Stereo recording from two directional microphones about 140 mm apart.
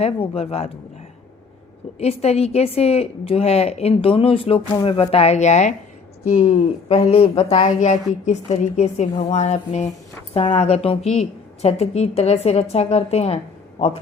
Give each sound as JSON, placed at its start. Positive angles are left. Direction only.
{"t": 0.0, "sound": "a woman's voice", "side_deg": 45}
{"t": 2.0, "sound": "a woman's voice", "side_deg": 50}